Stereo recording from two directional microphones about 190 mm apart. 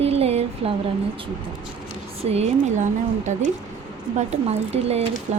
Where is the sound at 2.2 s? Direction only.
35° right (ahead or behind).